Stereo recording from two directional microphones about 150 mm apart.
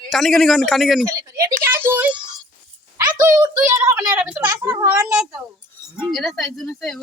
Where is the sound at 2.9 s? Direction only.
25° right (ahead or behind).